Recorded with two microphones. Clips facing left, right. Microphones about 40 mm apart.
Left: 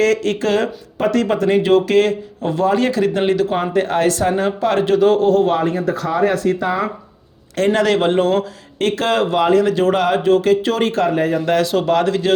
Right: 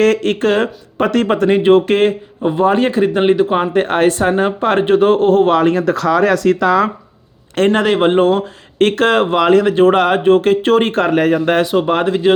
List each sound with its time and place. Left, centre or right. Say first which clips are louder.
0.0 s speech: right 3 dB; right
2.4 s speech: right 4 dB; centre; by 5.5 s right
5.5 s speech: right 5 dB; right
7.7 s speech: right 1 dB; right
8.8 s speech: right 5 dB; right
11.6 s speech: right 1 dB; centre